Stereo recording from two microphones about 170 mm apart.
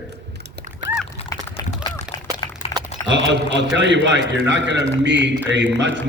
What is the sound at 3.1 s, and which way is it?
A man's voice, 90° right.